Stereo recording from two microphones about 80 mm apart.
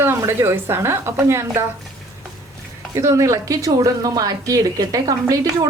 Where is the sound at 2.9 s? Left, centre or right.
Right.